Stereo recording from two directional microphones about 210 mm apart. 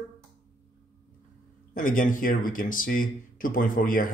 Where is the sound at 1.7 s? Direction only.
40° left (ahead or behind).